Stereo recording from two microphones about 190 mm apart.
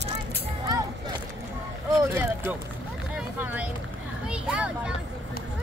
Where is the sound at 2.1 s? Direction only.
10° right (ahead or behind).